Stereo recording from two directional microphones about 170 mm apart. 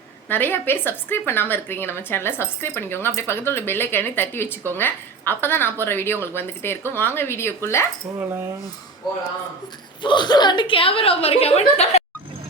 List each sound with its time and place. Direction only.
0.3 s a woman's voice: 10° left (ahead or behind)
10.0 s a woman's voice: 25° left (ahead or behind)